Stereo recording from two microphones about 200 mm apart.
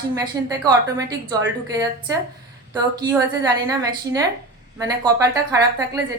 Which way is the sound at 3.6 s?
15° right (ahead or behind).